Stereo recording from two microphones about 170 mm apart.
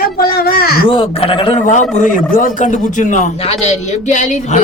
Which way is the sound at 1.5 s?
45° left (ahead or behind).